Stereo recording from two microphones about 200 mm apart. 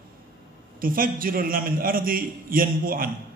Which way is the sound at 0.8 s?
45° right (ahead or behind).